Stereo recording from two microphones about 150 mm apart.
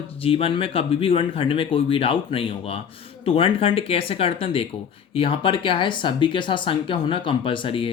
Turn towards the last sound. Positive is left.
turn(degrees=35)  # may be behind; listen again after turning